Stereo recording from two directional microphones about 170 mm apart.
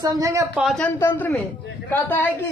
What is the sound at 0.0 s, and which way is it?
Speech, 20° right (ahead or behind).